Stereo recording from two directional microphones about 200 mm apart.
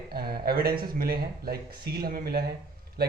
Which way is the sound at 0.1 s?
50° right (ahead or behind).